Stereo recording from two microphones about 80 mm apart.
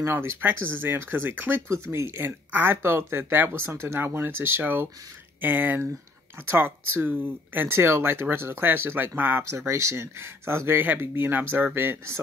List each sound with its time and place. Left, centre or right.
0.0 s speech: right
9.5 s speech: right